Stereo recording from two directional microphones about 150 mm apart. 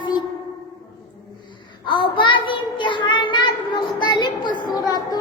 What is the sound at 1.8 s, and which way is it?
Child singing, 30° left (ahead or behind).